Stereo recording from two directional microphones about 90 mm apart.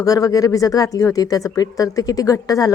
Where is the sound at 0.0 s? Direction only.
40° left (ahead or behind).